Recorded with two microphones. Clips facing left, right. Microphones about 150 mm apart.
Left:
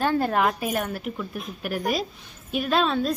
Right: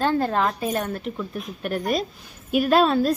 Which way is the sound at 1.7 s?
5° left (ahead or behind).